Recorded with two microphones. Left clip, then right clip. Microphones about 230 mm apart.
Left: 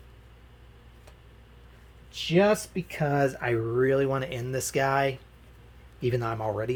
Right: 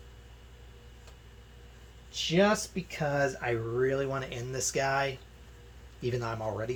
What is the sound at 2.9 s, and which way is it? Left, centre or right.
Speech, left.